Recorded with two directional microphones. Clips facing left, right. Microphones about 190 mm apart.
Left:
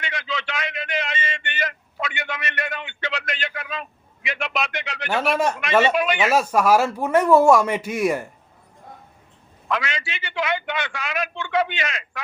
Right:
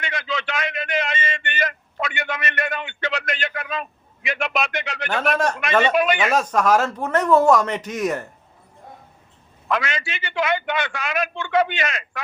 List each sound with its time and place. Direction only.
0.0 s a sound: 50° right (ahead or behind)
5.0 s speech: 10° left (ahead or behind)
5.9 s a man's voice: 50° right (ahead or behind)
6.1 s speech: 10° left (ahead or behind)
9.6 s a man's voice: 50° right (ahead or behind)